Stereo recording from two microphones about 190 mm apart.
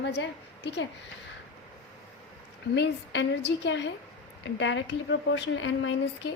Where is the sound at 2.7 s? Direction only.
65° left (ahead or behind).